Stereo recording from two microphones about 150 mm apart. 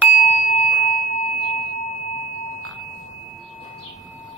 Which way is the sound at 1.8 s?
60° left (ahead or behind).